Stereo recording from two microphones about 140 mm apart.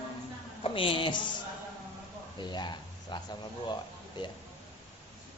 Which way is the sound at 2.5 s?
30° left (ahead or behind).